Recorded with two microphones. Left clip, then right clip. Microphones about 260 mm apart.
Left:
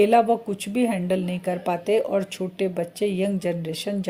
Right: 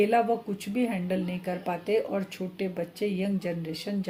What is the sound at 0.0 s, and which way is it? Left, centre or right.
Speech, left.